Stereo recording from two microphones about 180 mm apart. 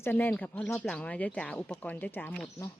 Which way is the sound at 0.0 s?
10° left (ahead or behind).